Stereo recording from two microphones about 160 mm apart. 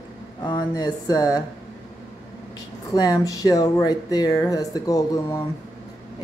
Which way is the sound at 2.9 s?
25° left (ahead or behind).